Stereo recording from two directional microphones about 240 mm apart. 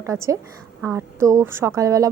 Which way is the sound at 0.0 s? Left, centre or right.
Centre.